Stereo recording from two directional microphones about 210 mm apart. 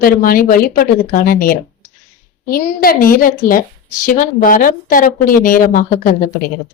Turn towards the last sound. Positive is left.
turn(degrees=40)  # may be behind; listen again after turning